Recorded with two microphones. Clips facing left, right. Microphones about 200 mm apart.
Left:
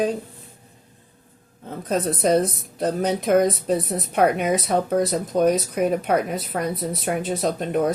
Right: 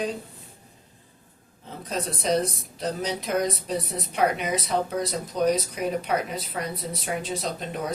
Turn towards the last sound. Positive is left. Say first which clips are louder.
# left 9 dB
turn(degrees=50)  # may be behind; listen again after turning